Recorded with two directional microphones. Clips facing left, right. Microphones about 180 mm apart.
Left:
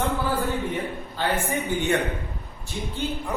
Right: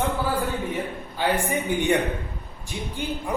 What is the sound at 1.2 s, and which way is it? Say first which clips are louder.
Speech: right 2 dB; 15° right (ahead or behind).